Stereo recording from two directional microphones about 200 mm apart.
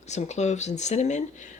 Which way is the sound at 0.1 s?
35° left (ahead or behind).